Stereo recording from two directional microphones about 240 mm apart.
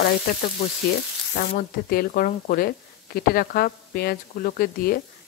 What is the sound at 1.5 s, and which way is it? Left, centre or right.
Speech, left.